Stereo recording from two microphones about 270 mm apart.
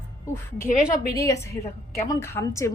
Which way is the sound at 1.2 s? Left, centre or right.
Centre.